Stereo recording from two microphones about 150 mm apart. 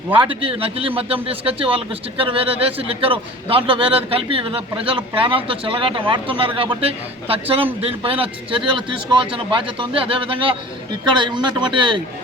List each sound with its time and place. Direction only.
0.1 s a man's voice: 35° right (ahead or behind)